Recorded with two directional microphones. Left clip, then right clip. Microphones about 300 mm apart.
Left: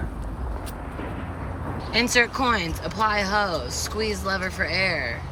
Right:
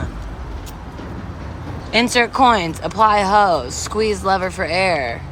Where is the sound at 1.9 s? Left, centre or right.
Centre.